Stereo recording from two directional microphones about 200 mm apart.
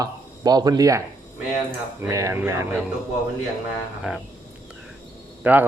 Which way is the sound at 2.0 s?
15° right (ahead or behind).